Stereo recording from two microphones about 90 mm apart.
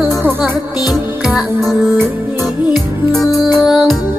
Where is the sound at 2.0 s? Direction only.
25° right (ahead or behind).